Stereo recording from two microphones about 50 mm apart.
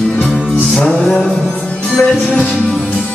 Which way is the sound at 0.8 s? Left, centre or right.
Centre.